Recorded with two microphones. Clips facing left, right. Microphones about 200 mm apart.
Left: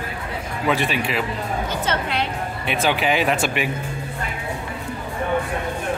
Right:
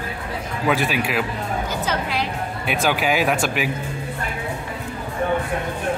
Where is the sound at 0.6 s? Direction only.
Centre (ahead or behind).